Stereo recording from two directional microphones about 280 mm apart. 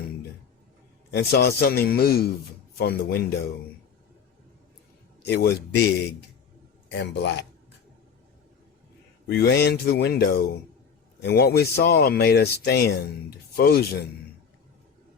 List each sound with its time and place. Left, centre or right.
1.1 s speech: left
5.2 s speech: left
9.2 s speech: left